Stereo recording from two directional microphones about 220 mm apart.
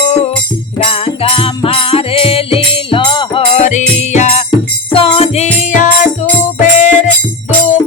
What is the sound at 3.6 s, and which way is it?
Music, 30° left (ahead or behind).